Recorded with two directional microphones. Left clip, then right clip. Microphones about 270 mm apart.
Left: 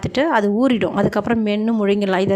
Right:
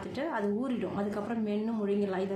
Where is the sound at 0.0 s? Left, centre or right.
Left.